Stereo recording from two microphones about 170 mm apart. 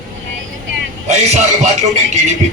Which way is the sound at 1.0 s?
40° right (ahead or behind).